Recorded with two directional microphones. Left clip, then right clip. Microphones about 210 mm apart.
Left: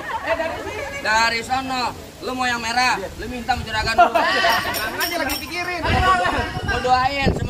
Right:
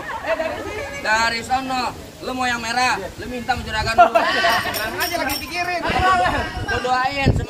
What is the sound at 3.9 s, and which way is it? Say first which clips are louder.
Speech: right 2 dB; 20° right (ahead or behind).